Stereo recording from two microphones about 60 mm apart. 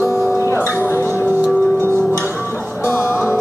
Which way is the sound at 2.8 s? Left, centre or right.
Left.